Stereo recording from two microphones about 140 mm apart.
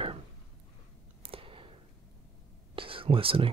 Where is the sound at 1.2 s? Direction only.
40° right (ahead or behind).